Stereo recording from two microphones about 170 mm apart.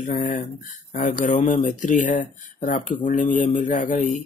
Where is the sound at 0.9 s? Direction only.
50° left (ahead or behind).